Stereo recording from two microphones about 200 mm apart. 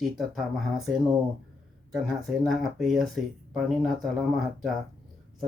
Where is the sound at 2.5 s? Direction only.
Centre (ahead or behind).